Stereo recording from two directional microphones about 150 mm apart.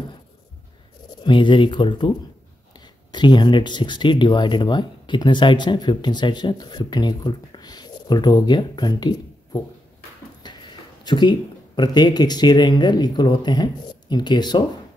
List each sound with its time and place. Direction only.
1.2 s speech: 30° left (ahead or behind)
10.4 s a sound: 30° left (ahead or behind)
11.1 s speech: 30° left (ahead or behind)